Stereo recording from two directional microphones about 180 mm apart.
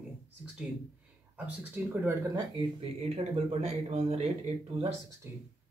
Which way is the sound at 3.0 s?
35° right (ahead or behind).